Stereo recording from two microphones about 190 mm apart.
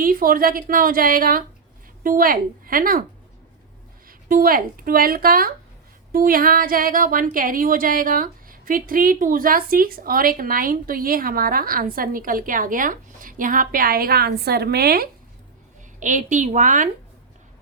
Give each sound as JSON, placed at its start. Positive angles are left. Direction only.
{"t": 0.0, "sound": "a woman's voice", "side_deg": -50}
{"t": 4.0, "sound": "a woman's voice", "side_deg": -50}
{"t": 16.0, "sound": "a woman's voice", "side_deg": -40}